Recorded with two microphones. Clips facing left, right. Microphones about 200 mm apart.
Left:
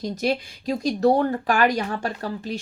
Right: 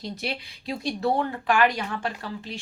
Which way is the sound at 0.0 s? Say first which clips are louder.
Left 8 dB; 40° left (ahead or behind).